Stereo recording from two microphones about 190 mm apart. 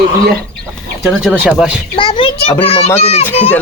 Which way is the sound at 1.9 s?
25° left (ahead or behind).